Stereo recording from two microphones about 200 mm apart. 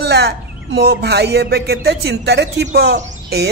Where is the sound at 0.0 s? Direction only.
55° right (ahead or behind).